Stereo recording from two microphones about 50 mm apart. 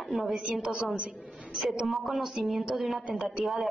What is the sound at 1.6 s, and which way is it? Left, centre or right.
A woman's voice, centre.